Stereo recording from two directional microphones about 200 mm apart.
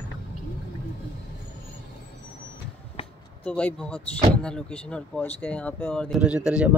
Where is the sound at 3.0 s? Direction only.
30° left (ahead or behind).